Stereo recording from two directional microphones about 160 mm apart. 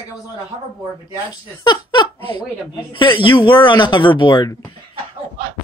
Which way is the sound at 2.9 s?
30° left (ahead or behind).